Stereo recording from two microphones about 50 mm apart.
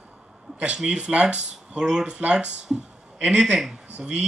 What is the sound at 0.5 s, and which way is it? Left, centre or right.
Speech, centre.